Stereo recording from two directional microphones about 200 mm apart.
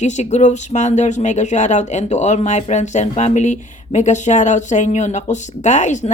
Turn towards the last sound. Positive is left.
turn(degrees=35)  # may be behind; listen again after turning